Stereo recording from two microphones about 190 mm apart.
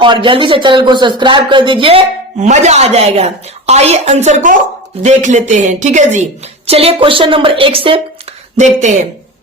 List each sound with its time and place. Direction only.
0.0 s a woman's voice: 25° right (ahead or behind)
8.5 s a woman's voice: 40° right (ahead or behind)